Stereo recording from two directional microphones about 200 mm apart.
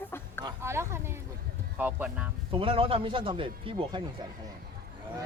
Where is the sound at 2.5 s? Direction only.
25° right (ahead or behind).